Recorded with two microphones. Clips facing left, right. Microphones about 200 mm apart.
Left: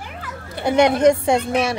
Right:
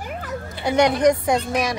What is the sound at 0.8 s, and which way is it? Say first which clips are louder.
Speech: left 2 dB; 25° left (ahead or behind).